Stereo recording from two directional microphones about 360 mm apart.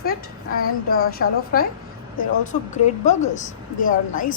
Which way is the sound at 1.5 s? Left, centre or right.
Left.